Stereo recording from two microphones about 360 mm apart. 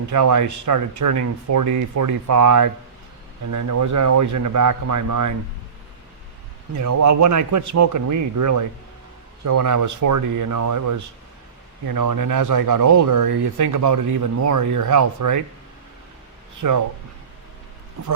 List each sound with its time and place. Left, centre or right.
0.1 s speech: right
6.7 s speech: right
16.6 s speech: right